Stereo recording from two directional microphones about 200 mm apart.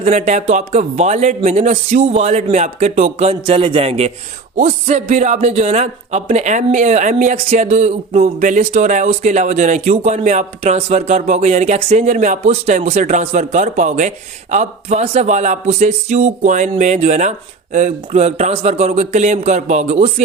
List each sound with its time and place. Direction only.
0.0 s speech: 35° right (ahead or behind)